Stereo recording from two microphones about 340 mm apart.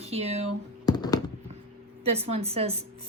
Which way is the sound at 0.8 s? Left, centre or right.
Centre.